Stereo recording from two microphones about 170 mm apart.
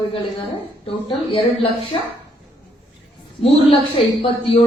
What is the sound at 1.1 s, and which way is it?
Speech, 35° left (ahead or behind).